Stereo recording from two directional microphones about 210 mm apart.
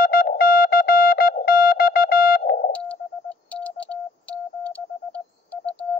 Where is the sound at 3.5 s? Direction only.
5° left (ahead or behind).